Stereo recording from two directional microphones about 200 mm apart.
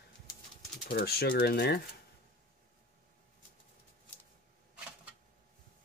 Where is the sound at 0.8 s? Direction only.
50° left (ahead or behind).